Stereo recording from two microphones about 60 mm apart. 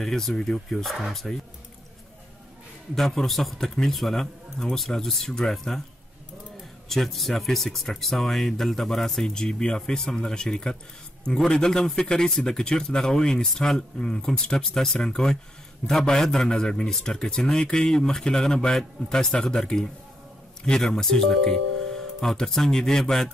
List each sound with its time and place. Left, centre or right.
0.0 s speech: centre
2.9 s speech: centre
6.9 s speech: centre